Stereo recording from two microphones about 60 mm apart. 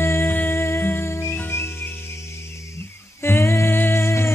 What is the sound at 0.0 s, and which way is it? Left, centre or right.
Music, left.